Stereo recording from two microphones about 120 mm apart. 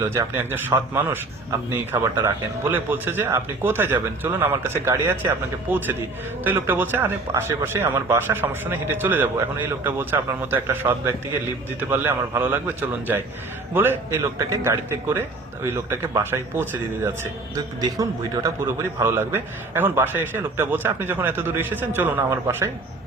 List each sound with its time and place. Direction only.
0.0 s a man's voice: 20° right (ahead or behind)
17.5 s a man's voice: 30° right (ahead or behind)